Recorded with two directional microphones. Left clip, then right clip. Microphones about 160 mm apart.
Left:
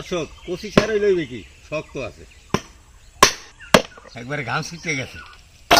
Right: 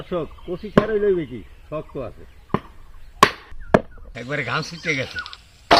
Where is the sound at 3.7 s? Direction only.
35° left (ahead or behind).